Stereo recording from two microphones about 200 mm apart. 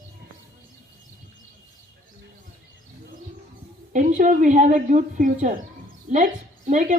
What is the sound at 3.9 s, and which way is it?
A woman's voice, 40° right (ahead or behind).